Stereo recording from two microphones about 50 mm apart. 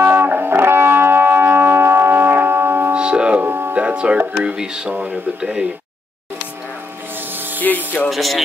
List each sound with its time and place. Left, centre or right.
0.0 s music: right
2.9 s music: centre
3.4 s music: right
3.7 s music: right
4.4 s speech: centre
7.7 s speech: left
8.1 s speech: centre